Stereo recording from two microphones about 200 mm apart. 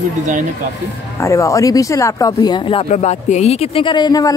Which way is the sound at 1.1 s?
15° left (ahead or behind).